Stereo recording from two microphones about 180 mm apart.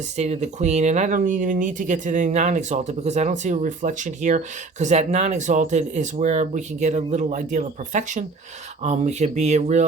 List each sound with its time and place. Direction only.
0.2 s speech: 40° right (ahead or behind)